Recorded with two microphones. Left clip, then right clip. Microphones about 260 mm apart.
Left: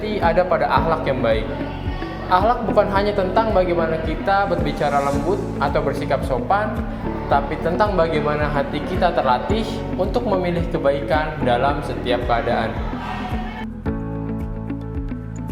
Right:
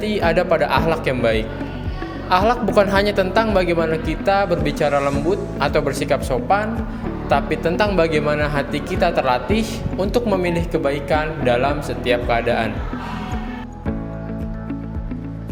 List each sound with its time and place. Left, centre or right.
0.0 s speech: right